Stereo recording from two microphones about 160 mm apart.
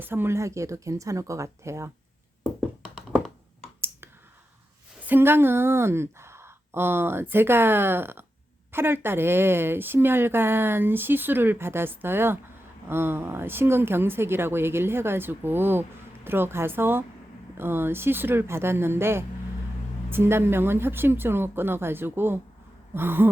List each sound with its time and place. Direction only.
0.0 s speech: 15° right (ahead or behind)
5.0 s speech: 15° right (ahead or behind)